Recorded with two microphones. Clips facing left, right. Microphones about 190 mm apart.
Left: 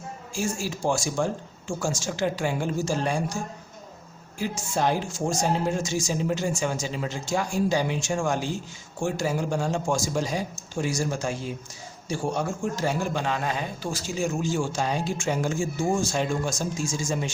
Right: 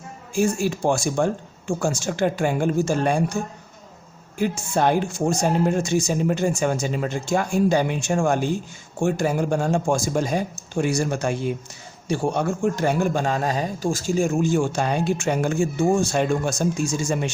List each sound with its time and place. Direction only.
0.3 s a man's voice: 60° right (ahead or behind)
4.4 s a man's voice: 60° right (ahead or behind)